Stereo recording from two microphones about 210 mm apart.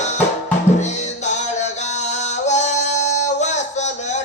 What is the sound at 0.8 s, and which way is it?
Music, 35° left (ahead or behind).